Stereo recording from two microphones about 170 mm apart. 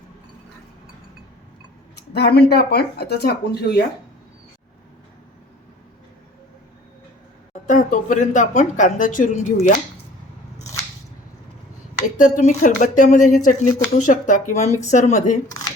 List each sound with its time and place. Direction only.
2.0 s speech: 75° left (ahead or behind)
7.7 s speech: 50° left (ahead or behind)
12.1 s speech: 50° left (ahead or behind)